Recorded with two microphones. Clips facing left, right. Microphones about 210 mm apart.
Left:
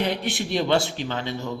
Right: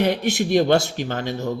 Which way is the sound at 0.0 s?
45° right (ahead or behind).